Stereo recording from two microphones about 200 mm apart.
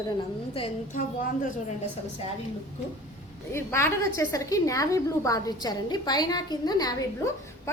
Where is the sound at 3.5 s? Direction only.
15° left (ahead or behind).